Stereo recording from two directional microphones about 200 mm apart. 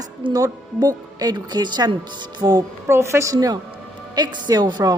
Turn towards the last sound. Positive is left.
turn(degrees=-20)  # may be behind; listen again after turning